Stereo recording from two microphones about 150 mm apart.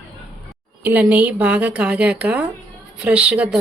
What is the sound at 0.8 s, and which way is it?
Speech, 10° right (ahead or behind).